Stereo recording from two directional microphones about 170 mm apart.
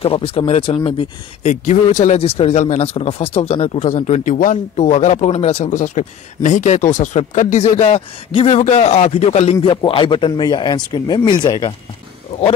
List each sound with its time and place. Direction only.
0.0 s speech: 35° left (ahead or behind)